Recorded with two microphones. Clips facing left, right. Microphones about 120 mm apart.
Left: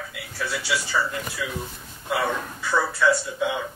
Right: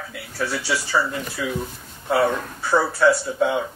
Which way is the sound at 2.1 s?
40° right (ahead or behind).